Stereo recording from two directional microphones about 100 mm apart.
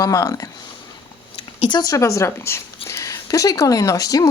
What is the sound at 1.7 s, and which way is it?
Speech, 40° left (ahead or behind).